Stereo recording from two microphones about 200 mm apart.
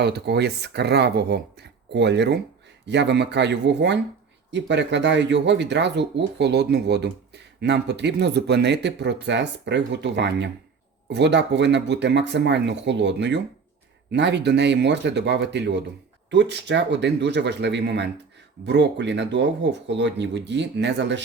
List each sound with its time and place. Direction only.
0.0 s speech: 55° right (ahead or behind)